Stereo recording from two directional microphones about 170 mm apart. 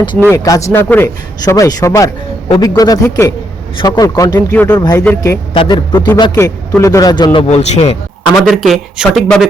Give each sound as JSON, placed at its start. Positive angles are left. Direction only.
{"t": 0.3, "sound": "a man's voice", "side_deg": 20}
{"t": 4.7, "sound": "a man's voice", "side_deg": 25}
{"t": 7.3, "sound": "speech", "side_deg": 40}
{"t": 8.4, "sound": "speech", "side_deg": 0}